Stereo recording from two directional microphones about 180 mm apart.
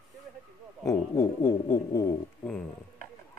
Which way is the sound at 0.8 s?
20° left (ahead or behind).